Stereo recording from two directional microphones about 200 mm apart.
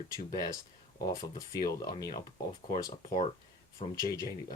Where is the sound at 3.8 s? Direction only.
35° left (ahead or behind).